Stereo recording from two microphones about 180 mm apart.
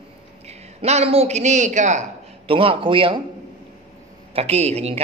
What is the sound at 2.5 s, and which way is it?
Speech, 30° right (ahead or behind).